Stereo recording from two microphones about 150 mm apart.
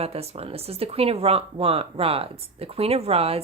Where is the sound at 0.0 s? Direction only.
45° right (ahead or behind).